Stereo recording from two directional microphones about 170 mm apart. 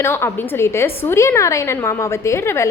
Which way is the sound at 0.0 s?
15° left (ahead or behind).